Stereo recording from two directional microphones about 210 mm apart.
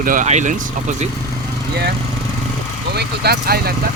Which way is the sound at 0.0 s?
40° right (ahead or behind).